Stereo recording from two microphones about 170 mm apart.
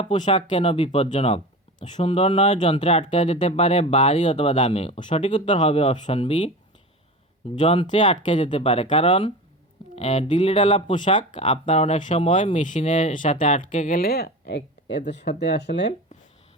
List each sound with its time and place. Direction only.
0.0 s speech: 35° left (ahead or behind)
7.6 s speech: 30° left (ahead or behind); by 14.0 s 50° left (ahead or behind)
14.0 s speech: 70° left (ahead or behind); by 15.9 s 90° left